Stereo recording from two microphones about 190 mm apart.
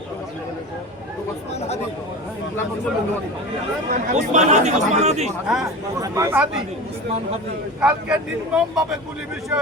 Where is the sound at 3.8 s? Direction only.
45° right (ahead or behind).